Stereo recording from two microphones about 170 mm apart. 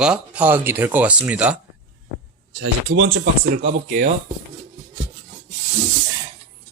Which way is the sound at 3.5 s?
70° right (ahead or behind).